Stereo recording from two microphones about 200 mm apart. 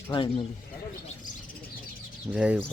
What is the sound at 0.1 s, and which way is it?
Speech, 25° left (ahead or behind).